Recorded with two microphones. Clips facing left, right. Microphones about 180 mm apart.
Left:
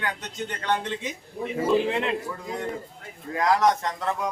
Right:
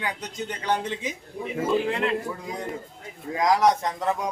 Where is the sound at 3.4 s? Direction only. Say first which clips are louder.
Right 1 dB; 15° right (ahead or behind).